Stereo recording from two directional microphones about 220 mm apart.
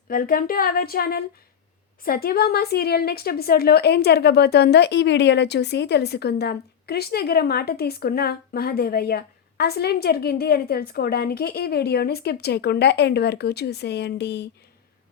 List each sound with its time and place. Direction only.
0.1 s a woman's voice: 40° left (ahead or behind)